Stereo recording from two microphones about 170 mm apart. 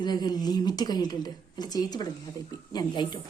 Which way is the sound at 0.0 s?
25° left (ahead or behind).